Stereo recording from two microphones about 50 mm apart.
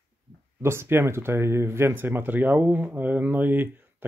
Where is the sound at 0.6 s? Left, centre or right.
Right.